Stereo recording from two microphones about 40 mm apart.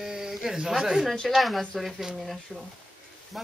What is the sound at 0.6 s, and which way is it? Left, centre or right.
Speech, centre.